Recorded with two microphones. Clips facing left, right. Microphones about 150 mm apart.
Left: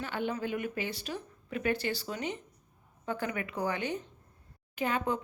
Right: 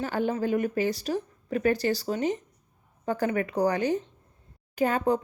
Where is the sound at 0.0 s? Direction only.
40° right (ahead or behind).